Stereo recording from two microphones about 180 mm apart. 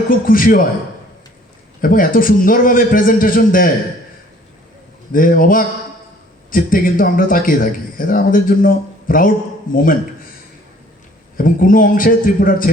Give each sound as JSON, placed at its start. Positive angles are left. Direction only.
{"t": 0.1, "sound": "speech", "side_deg": 50}
{"t": 1.8, "sound": "speech", "side_deg": 50}
{"t": 5.1, "sound": "speech", "side_deg": 50}
{"t": 11.3, "sound": "speech", "side_deg": 50}